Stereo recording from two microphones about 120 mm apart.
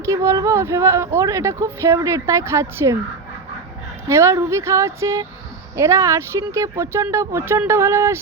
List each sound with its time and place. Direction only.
0.0 s speech: 25° right (ahead or behind)
4.1 s speech: 25° right (ahead or behind)